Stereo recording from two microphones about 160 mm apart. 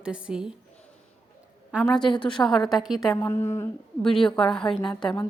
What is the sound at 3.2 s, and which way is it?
Speech, 15° left (ahead or behind).